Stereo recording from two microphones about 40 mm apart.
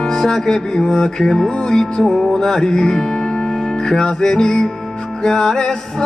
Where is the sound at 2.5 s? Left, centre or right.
Centre.